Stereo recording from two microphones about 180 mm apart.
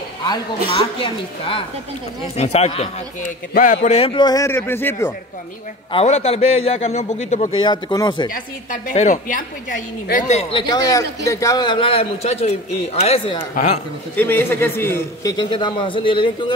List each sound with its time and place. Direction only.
0.7 s a man's voice: 30° left (ahead or behind)
3.5 s a man's voice: 45° left (ahead or behind); by 5.1 s 10° left (ahead or behind)
5.9 s a man's voice: 35° left (ahead or behind)
7.6 s a man's voice: 20° left (ahead or behind)
8.8 s a woman's voice: 45° left (ahead or behind)
10.7 s a man's voice: 20° left (ahead or behind)
14.1 s a man's voice: 10° left (ahead or behind); by 16.5 s 30° left (ahead or behind)